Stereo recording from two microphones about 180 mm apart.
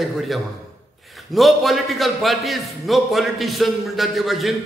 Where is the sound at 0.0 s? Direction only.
Centre (ahead or behind).